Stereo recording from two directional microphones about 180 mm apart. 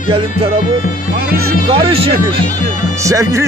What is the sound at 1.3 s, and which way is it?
Speech, 60° right (ahead or behind).